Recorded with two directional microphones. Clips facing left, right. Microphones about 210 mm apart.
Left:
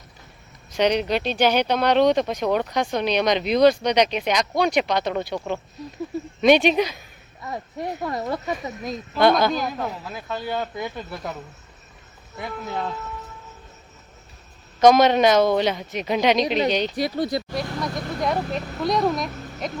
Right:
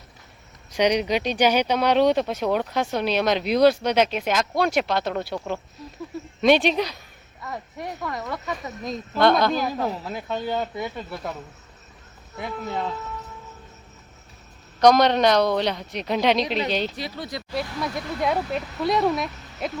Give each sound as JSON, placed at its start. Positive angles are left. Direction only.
{"t": 0.7, "sound": "speech", "side_deg": -10}
{"t": 7.4, "sound": "speech", "side_deg": 25}
{"t": 8.8, "sound": "speech", "side_deg": 5}
{"t": 9.8, "sound": "speech", "side_deg": -25}
{"t": 10.6, "sound": "speech", "side_deg": 0}
{"t": 12.4, "sound": "speech", "side_deg": 0}
{"t": 14.8, "sound": "speech", "side_deg": 5}
{"t": 17.0, "sound": "speech", "side_deg": 40}
{"t": 17.6, "sound": "speech", "side_deg": -5}